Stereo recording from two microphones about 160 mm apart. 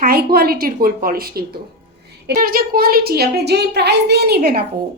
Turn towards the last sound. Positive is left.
turn(degrees=-75)  # may be behind; listen again after turning